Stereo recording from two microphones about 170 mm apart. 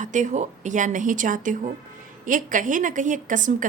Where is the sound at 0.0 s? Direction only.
45° right (ahead or behind).